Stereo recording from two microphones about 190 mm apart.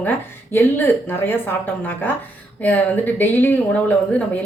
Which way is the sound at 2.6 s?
10° left (ahead or behind).